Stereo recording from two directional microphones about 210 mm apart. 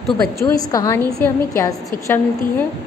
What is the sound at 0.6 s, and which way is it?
A woman's voice, 15° left (ahead or behind).